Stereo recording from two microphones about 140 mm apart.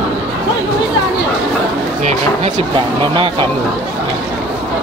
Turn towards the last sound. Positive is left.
turn(degrees=-40)  # may be behind; listen again after turning